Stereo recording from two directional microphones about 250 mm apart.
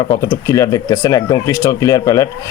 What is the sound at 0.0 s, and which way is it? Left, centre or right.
Speech, centre.